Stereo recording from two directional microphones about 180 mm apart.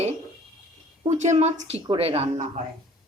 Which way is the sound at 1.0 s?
40° right (ahead or behind).